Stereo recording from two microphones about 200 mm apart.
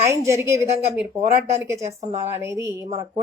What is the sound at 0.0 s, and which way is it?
A woman's voice, 15° right (ahead or behind).